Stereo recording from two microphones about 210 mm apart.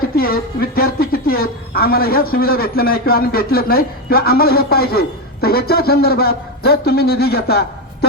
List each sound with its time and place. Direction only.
0.2 s a woman's voice: 45° left (ahead or behind)